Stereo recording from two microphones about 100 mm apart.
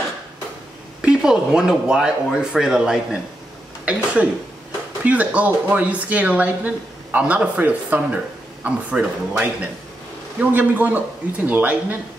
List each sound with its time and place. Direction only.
1.0 s speech: 5° right (ahead or behind)